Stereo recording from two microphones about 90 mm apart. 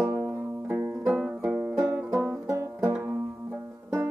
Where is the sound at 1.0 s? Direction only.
15° right (ahead or behind).